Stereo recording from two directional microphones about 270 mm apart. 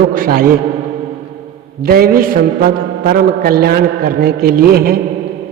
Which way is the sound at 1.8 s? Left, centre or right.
Right.